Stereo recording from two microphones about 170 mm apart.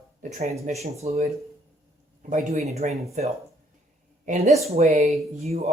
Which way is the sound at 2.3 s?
45° right (ahead or behind).